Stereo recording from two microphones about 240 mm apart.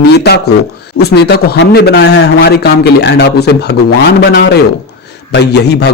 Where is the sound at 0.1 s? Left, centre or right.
Left.